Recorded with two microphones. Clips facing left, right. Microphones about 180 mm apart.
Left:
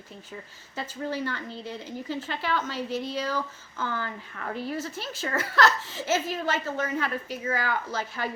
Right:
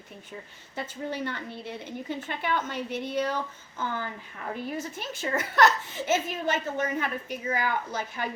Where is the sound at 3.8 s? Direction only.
20° right (ahead or behind).